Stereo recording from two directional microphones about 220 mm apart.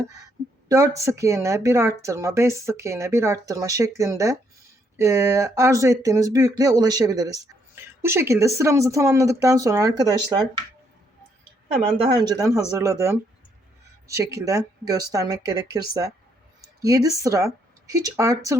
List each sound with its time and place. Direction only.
0.7 s speech: 15° right (ahead or behind)
11.9 s speech: 20° right (ahead or behind)